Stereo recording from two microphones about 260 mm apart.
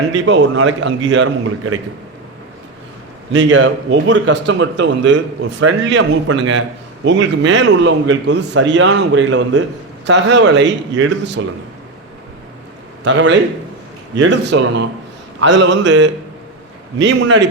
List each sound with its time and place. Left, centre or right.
0.3 s a man's voice: right
3.3 s a man's voice: right
4.4 s a man's voice: right
13.1 s a man's voice: right